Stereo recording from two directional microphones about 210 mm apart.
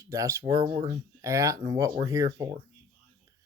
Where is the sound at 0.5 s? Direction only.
25° right (ahead or behind).